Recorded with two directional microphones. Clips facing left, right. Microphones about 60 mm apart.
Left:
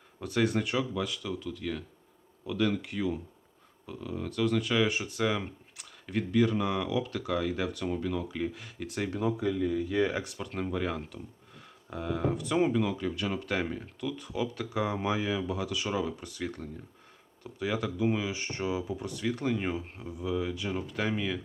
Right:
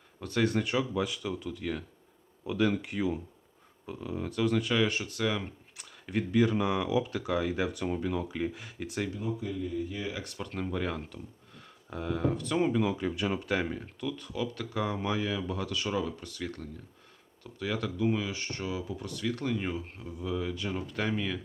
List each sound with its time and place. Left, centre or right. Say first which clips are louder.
0.2 s speech: even; centre
0.9 s speech: right 2 dB; centre
4.9 s speech: left 1 dB; centre
5.7 s speech: right 1 dB; centre
9.0 s speech: left 5 dB; left
10.2 s speech: left 1 dB; centre
12.7 s speech: even; centre
13.5 s speech: right 1 dB; centre
14.2 s speech: left 1 dB; centre